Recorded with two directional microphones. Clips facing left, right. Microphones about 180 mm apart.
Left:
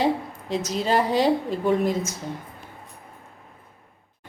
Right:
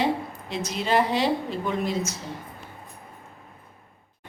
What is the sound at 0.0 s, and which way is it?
A woman's voice, 40° left (ahead or behind).